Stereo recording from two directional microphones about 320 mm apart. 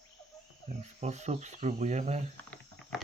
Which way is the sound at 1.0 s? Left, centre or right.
Right.